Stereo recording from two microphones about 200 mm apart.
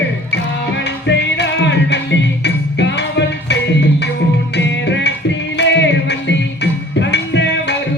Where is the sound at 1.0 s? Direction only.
60° left (ahead or behind).